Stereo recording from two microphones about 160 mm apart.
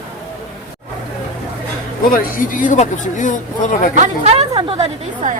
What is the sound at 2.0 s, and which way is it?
Speech, 60° left (ahead or behind).